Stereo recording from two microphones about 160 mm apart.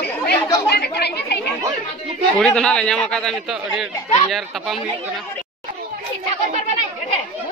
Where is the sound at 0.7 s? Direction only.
90° left.